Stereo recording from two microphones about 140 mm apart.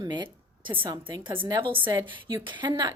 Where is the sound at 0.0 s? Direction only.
30° right (ahead or behind).